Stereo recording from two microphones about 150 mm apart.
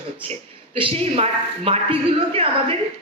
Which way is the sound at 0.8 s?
35° right (ahead or behind).